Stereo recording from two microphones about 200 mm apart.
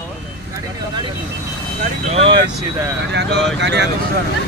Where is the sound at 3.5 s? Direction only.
60° right (ahead or behind).